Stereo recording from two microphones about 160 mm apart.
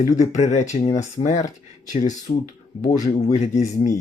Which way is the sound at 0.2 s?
45° left (ahead or behind).